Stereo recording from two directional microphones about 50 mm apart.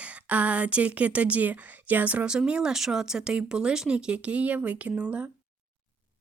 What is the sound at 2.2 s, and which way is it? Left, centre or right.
Speech, centre.